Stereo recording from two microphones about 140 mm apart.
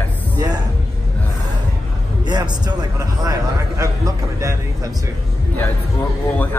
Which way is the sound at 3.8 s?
25° right (ahead or behind).